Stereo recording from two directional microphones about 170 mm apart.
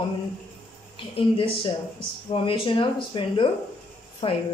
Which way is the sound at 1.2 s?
30° left (ahead or behind).